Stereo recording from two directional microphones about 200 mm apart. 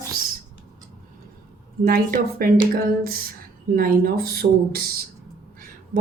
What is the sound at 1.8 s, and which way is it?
A woman's voice, 45° right (ahead or behind).